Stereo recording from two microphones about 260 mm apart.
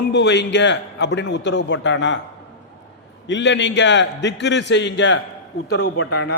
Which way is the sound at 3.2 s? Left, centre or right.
Left.